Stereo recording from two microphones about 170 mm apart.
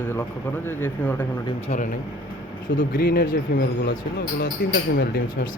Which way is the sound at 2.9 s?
60° left (ahead or behind).